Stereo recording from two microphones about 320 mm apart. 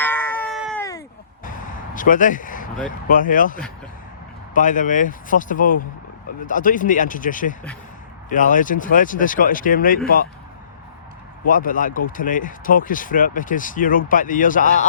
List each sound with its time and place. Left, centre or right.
0.0 s a sound: centre
2.0 s speech: left
11.4 s speech: left